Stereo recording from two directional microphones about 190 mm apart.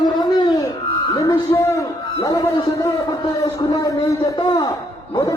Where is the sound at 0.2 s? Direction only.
20° left (ahead or behind).